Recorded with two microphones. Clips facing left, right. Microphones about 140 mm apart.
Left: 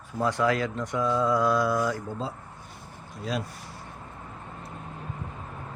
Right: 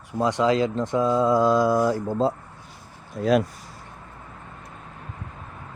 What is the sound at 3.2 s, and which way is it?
Speech, 65° right (ahead or behind).